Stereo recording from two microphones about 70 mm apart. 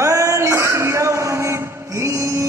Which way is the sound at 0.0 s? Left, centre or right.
Right.